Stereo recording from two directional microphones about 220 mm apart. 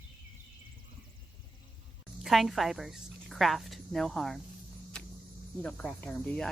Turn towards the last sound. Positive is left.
turn(degrees=5)  # may be behind; listen again after turning